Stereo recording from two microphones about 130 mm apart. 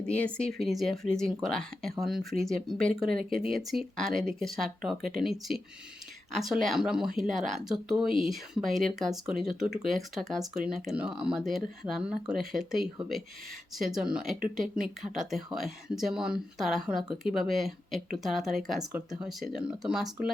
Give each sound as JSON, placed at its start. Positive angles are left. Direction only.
{"t": 0.1, "sound": "speech", "side_deg": 10}
{"t": 3.1, "sound": "speech", "side_deg": -90}
{"t": 3.5, "sound": "speech", "side_deg": 0}